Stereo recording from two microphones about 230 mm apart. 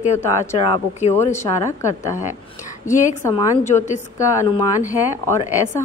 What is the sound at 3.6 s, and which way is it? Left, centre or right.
Speech, left.